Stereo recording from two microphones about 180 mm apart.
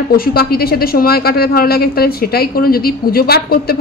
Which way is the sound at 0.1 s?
55° left (ahead or behind).